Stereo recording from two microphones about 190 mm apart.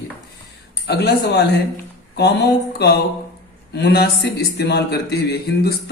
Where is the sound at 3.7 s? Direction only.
60° left (ahead or behind).